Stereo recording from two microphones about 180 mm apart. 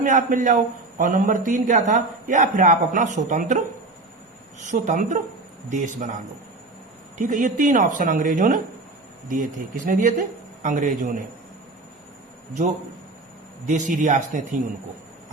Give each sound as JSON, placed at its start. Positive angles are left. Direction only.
{"t": 0.0, "sound": "a man's voice", "side_deg": -45}
{"t": 4.6, "sound": "a man's voice", "side_deg": -40}
{"t": 7.2, "sound": "a man's voice", "side_deg": -45}
{"t": 13.7, "sound": "a man's voice", "side_deg": -45}